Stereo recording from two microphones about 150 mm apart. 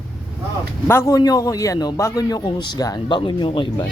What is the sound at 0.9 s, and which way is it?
A man's voice, 15° left (ahead or behind).